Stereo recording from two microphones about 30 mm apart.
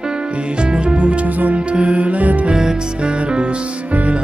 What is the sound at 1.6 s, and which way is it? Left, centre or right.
Music, right.